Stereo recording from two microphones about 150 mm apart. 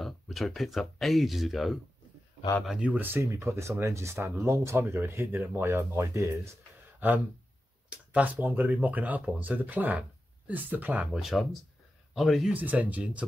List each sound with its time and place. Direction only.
0.0 s speech: centre (ahead or behind); by 6.5 s 20° right (ahead or behind)
7.9 s speech: 10° right (ahead or behind)